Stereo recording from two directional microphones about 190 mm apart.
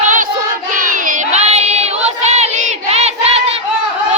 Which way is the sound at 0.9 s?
40° right (ahead or behind).